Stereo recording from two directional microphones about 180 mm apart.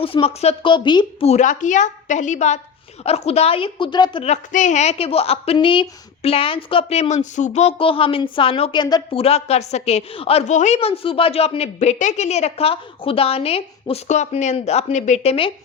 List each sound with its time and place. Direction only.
0.0 s a woman's voice: 30° left (ahead or behind)